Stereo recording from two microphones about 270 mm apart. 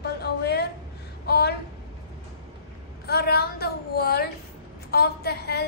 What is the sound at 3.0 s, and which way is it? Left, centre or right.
A woman's voice, left.